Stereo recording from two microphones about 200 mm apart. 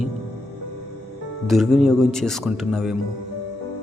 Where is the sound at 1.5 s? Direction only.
Centre (ahead or behind).